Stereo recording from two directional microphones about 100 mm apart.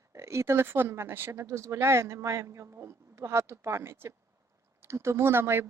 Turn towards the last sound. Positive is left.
turn(degrees=-25)  # may be behind; listen again after turning